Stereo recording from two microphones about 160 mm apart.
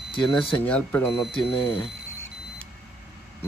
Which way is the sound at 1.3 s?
35° left (ahead or behind).